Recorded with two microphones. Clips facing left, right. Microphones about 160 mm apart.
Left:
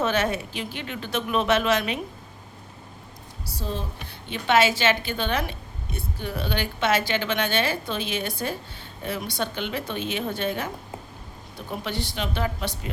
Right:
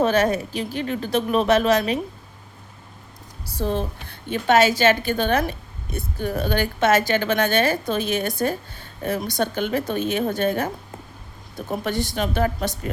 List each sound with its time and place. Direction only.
0.0 s speech: 40° right (ahead or behind)
3.6 s a woman's voice: 60° right (ahead or behind)
11.7 s a woman's voice: 45° right (ahead or behind)